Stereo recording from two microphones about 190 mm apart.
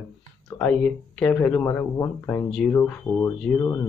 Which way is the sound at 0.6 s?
5° left (ahead or behind).